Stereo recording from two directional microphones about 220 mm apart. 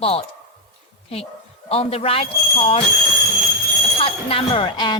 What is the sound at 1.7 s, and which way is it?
Speech, 25° left (ahead or behind).